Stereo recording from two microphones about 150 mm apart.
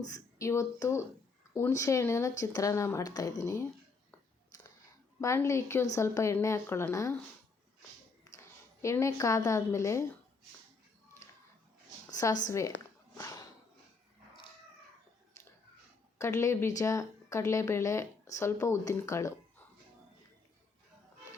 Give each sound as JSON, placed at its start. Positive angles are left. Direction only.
{"t": 0.0, "sound": "speech", "side_deg": 20}
{"t": 5.2, "sound": "speech", "side_deg": 20}
{"t": 8.8, "sound": "speech", "side_deg": 20}
{"t": 12.1, "sound": "a woman's voice", "side_deg": 20}
{"t": 13.1, "sound": "a sound", "side_deg": 20}
{"t": 16.1, "sound": "a woman's voice", "side_deg": 20}